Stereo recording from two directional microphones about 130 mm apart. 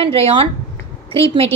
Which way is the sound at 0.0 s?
50° right (ahead or behind).